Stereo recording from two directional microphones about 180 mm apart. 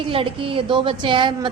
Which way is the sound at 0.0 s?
30° right (ahead or behind).